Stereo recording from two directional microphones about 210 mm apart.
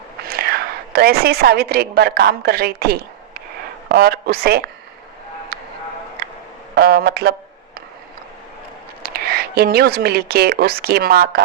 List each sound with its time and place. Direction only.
0.3 s a woman's voice: 45° right (ahead or behind)
5.5 s a sound: 50° right (ahead or behind)
6.2 s music: 50° right (ahead or behind)
6.7 s speech: 50° right (ahead or behind)
9.0 s speech: 45° right (ahead or behind)